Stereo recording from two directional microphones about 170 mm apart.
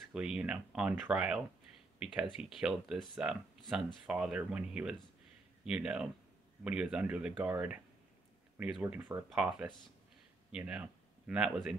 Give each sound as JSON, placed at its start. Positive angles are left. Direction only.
{"t": 0.1, "sound": "speech", "side_deg": -5}